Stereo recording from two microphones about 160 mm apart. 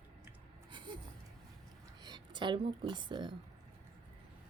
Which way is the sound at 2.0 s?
30° right (ahead or behind).